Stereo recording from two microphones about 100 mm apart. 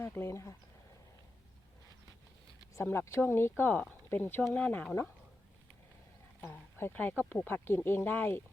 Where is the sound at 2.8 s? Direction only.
25° left (ahead or behind).